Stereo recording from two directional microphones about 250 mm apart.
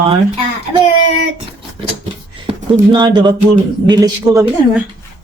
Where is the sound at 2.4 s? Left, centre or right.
Centre.